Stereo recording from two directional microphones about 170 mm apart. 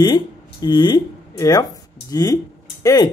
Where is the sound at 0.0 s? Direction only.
25° left (ahead or behind).